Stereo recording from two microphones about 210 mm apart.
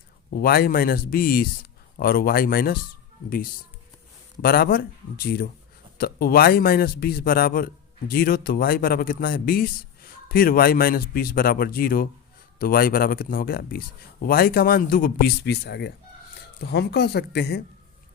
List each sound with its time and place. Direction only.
0.3 s a man's voice: 45° left (ahead or behind)
4.4 s a man's voice: 45° left (ahead or behind)